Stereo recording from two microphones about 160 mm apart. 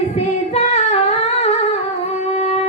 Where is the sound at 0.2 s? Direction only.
40° left (ahead or behind).